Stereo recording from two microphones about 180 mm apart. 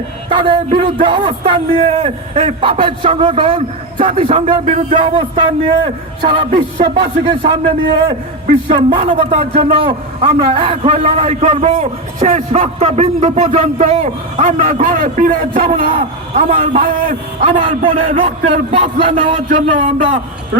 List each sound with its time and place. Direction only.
0.3 s a man's voice: 30° right (ahead or behind); by 15.4 s 50° right (ahead or behind)
15.9 s a man's voice: 35° right (ahead or behind)
17.5 s a man's voice: 30° right (ahead or behind)